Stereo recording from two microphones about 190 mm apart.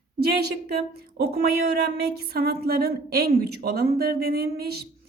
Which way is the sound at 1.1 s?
55° right (ahead or behind).